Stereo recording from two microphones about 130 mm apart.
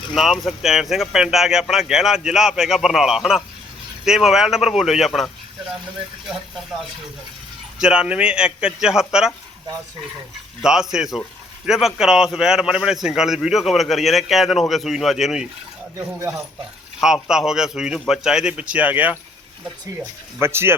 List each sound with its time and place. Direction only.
0.1 s a man's voice: centre (ahead or behind)
7.8 s a man's voice: 5° right (ahead or behind)
10.6 s a man's voice: 5° right (ahead or behind)
16.0 s speech: 20° right (ahead or behind)
17.0 s a man's voice: 5° right (ahead or behind)